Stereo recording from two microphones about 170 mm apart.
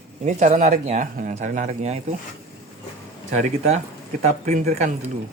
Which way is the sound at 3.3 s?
40° right (ahead or behind).